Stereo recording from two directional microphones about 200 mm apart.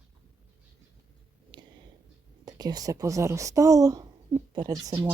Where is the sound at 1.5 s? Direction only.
20° right (ahead or behind).